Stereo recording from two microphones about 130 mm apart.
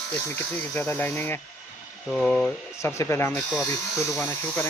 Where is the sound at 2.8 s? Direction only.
20° left (ahead or behind).